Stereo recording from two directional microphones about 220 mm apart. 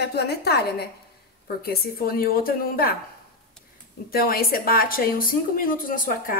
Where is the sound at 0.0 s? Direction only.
50° left (ahead or behind).